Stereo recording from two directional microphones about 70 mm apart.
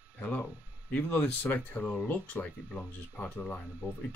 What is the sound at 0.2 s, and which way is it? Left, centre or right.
Speech, centre.